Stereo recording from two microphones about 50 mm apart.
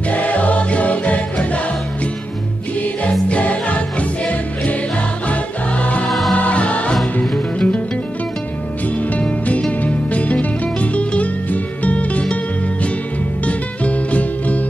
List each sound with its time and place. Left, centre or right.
0.1 s music: left
2.8 s music: left
6.0 s music: centre
6.3 s music: left
9.0 s music: left
13.5 s music: left